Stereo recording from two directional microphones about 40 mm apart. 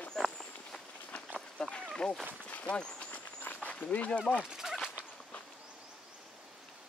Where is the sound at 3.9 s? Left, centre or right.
Left.